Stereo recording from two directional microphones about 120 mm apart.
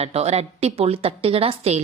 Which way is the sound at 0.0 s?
60° right (ahead or behind).